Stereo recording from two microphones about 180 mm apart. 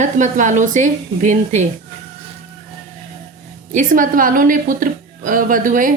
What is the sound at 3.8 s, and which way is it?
A woman's voice, 50° right (ahead or behind).